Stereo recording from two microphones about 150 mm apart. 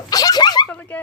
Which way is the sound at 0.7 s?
10° left (ahead or behind).